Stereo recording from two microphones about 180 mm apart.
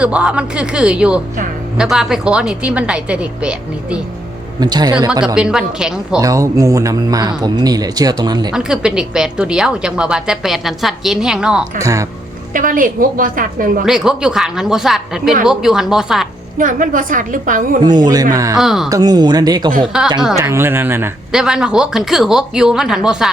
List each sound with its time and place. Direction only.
0.0 s a woman's voice: 5° right (ahead or behind)
4.6 s speech: 25° right (ahead or behind)
5.2 s a woman's voice: 5° right (ahead or behind)
6.1 s speech: 20° right (ahead or behind)
8.5 s a woman's voice: 5° right (ahead or behind)
11.8 s speech: 15° right (ahead or behind)
12.5 s a woman's voice: 50° right (ahead or behind)
13.8 s a woman's voice: 5° right (ahead or behind)
16.6 s a woman's voice: 50° right (ahead or behind)
17.8 s speech: 25° right (ahead or behind)
18.5 s a woman's voice: centre (ahead or behind)
18.9 s speech: 20° right (ahead or behind)
19.9 s a woman's voice: 5° right (ahead or behind)
20.3 s a woman's voice: 15° right (ahead or behind)